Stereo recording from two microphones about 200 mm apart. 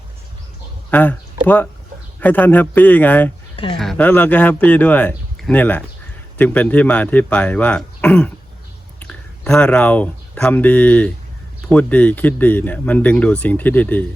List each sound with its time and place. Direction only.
0.9 s speech: 10° left (ahead or behind)
3.5 s a sound: 25° left (ahead or behind)
3.8 s speech: 5° left (ahead or behind)